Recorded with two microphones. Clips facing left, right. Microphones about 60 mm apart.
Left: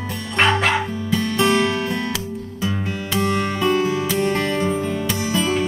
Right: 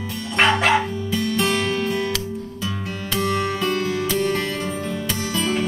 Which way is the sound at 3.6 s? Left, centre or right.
Left.